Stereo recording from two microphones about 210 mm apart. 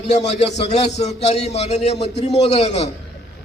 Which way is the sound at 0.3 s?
30° left (ahead or behind).